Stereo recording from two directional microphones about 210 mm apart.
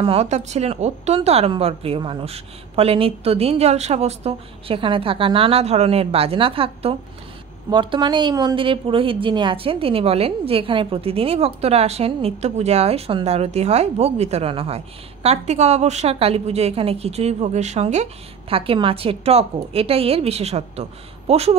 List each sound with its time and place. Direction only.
0.0 s a woman's voice: 30° right (ahead or behind)